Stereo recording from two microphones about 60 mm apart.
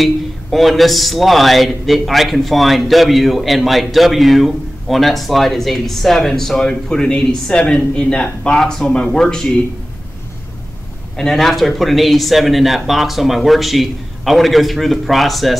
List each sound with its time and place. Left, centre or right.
0.0 s speech: centre
11.1 s speech: centre